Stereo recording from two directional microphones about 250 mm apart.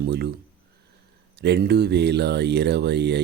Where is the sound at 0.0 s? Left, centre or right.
Right.